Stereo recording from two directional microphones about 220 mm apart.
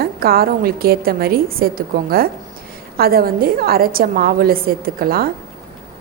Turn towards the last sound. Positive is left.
turn(degrees=-45)  # may be behind; listen again after turning